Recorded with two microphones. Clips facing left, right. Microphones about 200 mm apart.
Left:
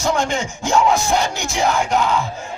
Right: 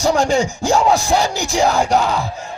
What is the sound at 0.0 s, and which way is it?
Crowd, 35° right (ahead or behind).